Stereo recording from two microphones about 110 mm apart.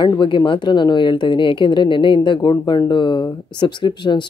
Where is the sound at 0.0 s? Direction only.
45° left (ahead or behind).